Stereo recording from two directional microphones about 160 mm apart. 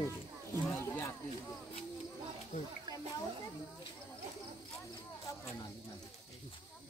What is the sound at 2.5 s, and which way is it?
Speech, 45° left (ahead or behind).